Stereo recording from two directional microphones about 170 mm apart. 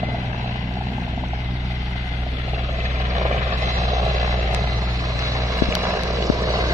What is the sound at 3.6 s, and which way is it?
Vehicle, 20° right (ahead or behind).